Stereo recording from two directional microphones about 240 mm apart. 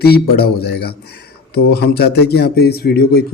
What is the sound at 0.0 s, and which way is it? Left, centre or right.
A man's voice, left.